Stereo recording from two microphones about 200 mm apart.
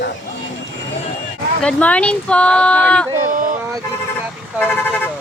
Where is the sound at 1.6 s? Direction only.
5° left (ahead or behind).